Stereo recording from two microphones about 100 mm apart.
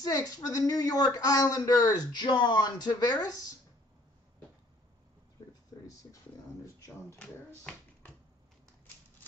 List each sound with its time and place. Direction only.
0.0 s speech: 40° left (ahead or behind)
5.7 s a sound: 30° left (ahead or behind)
7.2 s a child's voice: 10° left (ahead or behind)